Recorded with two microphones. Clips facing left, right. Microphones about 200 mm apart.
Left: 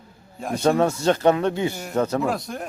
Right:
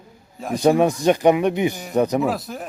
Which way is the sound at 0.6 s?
15° right (ahead or behind).